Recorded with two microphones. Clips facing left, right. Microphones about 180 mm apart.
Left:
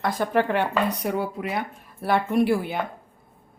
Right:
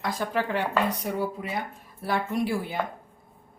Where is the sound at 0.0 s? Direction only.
60° left (ahead or behind).